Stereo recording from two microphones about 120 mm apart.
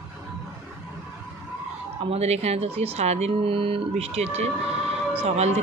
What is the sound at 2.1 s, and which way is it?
Speech, 65° right (ahead or behind).